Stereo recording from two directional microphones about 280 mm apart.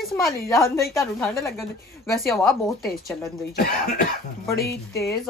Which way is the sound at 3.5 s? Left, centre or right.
Left.